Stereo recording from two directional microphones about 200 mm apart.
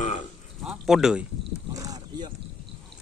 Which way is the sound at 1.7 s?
15° right (ahead or behind).